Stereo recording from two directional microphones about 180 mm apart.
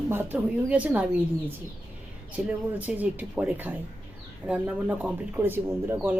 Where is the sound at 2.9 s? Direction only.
10° right (ahead or behind).